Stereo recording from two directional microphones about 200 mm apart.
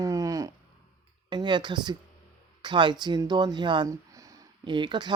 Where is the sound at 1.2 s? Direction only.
20° right (ahead or behind).